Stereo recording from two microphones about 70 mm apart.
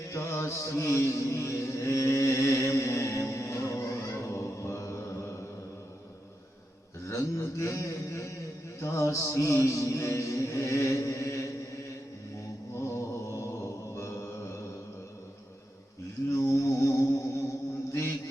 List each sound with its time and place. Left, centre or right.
0.1 s mantra: left
7.1 s a sound: left
8.8 s mantra: left
12.7 s mantra: left
16.3 s music: left